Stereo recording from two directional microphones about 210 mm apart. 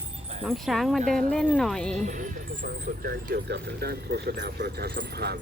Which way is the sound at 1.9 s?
35° right (ahead or behind).